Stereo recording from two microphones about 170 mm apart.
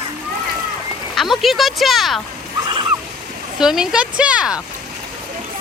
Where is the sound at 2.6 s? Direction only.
25° right (ahead or behind).